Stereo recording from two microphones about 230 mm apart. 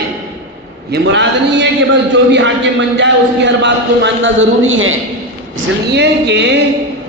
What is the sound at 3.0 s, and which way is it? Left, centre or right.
A man's voice, right.